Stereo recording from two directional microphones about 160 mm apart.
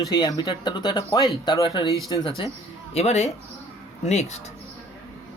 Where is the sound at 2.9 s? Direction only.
40° left (ahead or behind).